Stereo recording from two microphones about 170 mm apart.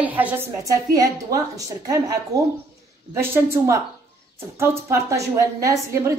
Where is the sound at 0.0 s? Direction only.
10° right (ahead or behind).